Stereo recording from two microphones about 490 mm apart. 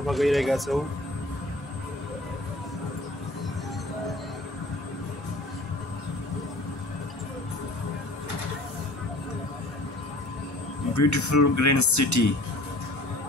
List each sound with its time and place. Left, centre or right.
0.0 s speech: centre
11.0 s speech: left